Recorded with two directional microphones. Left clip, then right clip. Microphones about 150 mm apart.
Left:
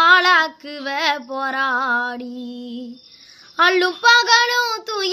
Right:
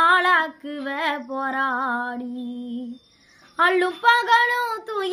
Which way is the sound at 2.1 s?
50° left (ahead or behind).